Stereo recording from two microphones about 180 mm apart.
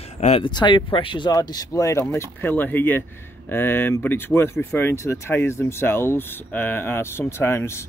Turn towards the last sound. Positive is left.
turn(degrees=15)  # may be behind; listen again after turning